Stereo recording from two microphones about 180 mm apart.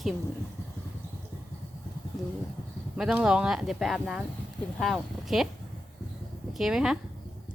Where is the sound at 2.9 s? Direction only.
5° right (ahead or behind).